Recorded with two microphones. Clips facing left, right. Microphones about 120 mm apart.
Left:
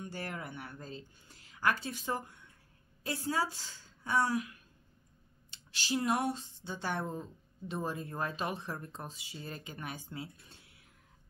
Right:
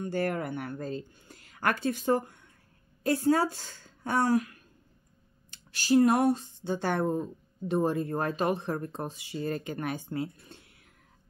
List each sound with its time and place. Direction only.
0.0 s a woman's voice: 55° right (ahead or behind)